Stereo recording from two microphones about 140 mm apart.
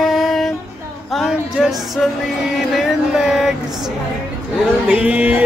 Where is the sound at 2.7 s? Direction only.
5° right (ahead or behind).